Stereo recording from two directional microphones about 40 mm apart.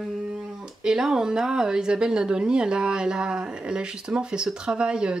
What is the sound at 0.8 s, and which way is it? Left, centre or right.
Speech, centre.